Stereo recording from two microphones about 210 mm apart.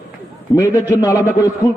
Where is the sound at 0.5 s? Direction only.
15° left (ahead or behind).